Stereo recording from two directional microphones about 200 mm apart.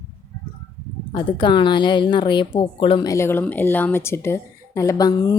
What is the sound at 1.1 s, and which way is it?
A woman's voice, 25° left (ahead or behind).